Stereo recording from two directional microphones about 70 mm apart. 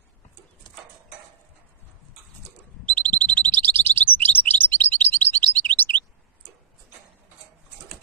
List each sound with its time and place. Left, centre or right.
2.8 s bird: centre
5.5 s chirp: left